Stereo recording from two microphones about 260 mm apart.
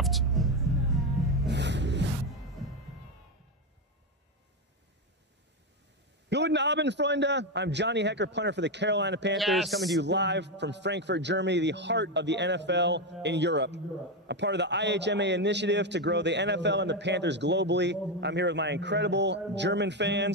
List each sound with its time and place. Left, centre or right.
0.0 s music: centre
1.5 s music: right
6.2 s a man's voice: right
9.4 s a man's voice: centre
9.9 s a man's voice: right